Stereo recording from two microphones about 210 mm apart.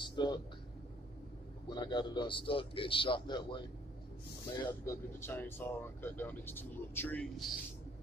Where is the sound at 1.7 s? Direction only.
20° left (ahead or behind).